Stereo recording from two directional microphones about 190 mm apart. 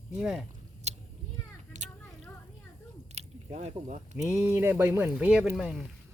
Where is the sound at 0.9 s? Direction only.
35° right (ahead or behind).